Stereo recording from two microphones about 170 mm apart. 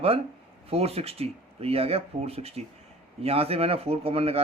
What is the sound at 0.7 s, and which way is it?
Speech, 35° right (ahead or behind).